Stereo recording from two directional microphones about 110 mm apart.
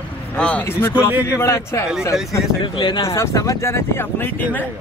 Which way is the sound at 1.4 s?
25° left (ahead or behind).